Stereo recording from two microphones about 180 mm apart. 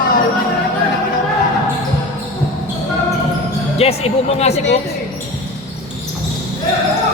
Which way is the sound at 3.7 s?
35° left (ahead or behind).